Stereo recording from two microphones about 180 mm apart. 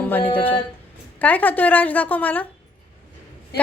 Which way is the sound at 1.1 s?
10° left (ahead or behind).